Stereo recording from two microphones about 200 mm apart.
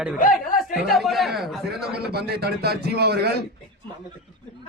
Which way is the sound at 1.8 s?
50° right (ahead or behind).